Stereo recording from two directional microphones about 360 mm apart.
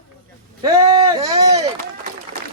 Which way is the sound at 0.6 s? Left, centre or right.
Centre.